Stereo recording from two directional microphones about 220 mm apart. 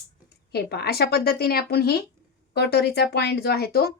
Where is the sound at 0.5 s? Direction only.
45° left (ahead or behind).